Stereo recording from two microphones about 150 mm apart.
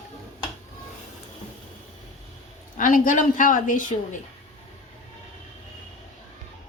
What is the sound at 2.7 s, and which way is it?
A man's voice, 65° left (ahead or behind).